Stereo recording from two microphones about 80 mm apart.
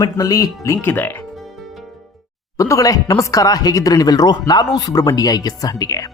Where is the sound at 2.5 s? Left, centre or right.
Left.